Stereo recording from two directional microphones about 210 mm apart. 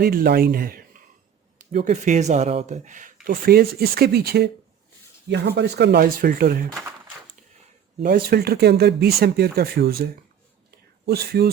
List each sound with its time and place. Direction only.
0.0 s speech: 45° right (ahead or behind)
8.0 s speech: 45° right (ahead or behind)